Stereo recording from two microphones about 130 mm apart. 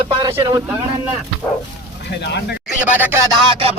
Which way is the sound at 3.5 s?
45° right (ahead or behind).